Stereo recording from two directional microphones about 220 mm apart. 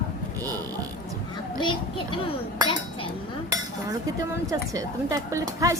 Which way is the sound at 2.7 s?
25° left (ahead or behind).